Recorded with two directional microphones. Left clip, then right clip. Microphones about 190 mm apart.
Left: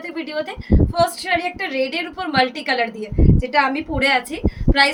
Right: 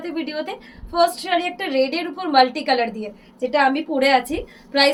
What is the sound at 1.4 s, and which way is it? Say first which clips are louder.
Speech: right 2 dB; 20° left (ahead or behind).